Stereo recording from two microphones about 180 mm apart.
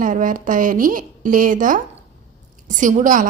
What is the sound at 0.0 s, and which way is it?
A woman's voice, 45° right (ahead or behind).